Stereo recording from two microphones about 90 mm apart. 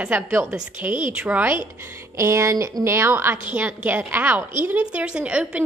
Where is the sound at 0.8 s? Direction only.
30° right (ahead or behind).